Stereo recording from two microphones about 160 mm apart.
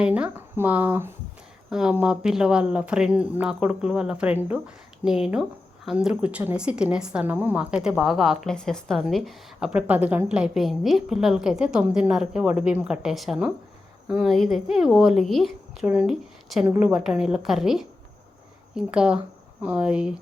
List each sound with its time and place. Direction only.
0.0 s speech: 10° right (ahead or behind)